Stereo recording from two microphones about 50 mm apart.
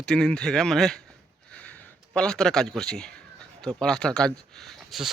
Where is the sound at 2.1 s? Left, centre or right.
Centre.